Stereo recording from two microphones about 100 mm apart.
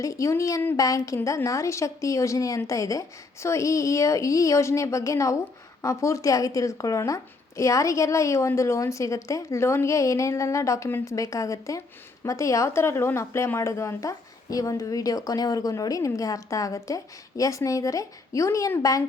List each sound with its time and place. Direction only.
0.0 s speech: 30° left (ahead or behind)